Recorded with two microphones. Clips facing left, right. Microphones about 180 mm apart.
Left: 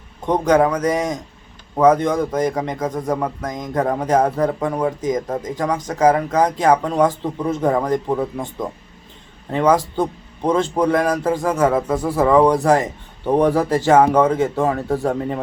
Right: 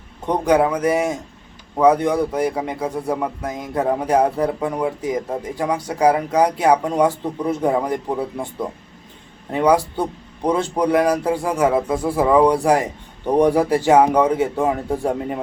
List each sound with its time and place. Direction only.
0.4 s a man's voice: 10° right (ahead or behind)